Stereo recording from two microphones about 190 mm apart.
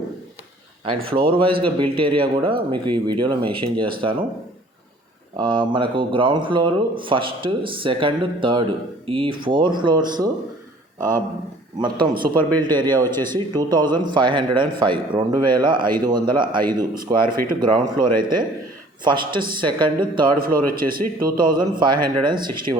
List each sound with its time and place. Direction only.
1.1 s speech: 25° right (ahead or behind)
5.4 s speech: 25° right (ahead or behind)
11.8 s speech: 25° right (ahead or behind)
13.1 s speech: 10° left (ahead or behind)
13.5 s speech: 20° right (ahead or behind)
15.9 s a man's voice: 50° right (ahead or behind)
16.1 s speech: 25° right (ahead or behind)
17.2 s a man's voice: 45° right (ahead or behind)
17.6 s speech: 25° right (ahead or behind)
20.4 s a man's voice: 50° right (ahead or behind)
21.6 s speech: 25° right (ahead or behind)